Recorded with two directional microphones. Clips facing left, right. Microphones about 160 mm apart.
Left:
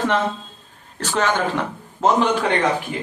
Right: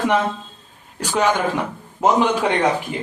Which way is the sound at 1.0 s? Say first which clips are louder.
Right 2 dB; 10° right (ahead or behind).